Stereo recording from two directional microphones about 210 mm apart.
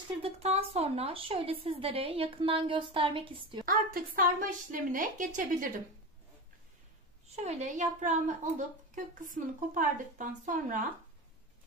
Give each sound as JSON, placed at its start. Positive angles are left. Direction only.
{"t": 0.2, "sound": "a woman's voice", "side_deg": -30}
{"t": 3.6, "sound": "a woman's voice", "side_deg": -45}
{"t": 7.3, "sound": "a woman's voice", "side_deg": -30}